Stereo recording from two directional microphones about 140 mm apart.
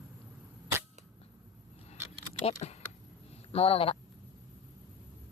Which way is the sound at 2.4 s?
50° left (ahead or behind).